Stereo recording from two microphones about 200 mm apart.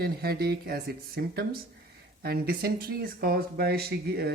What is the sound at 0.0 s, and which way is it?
Speech, 50° right (ahead or behind).